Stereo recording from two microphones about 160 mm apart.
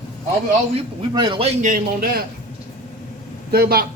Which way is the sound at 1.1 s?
30° right (ahead or behind).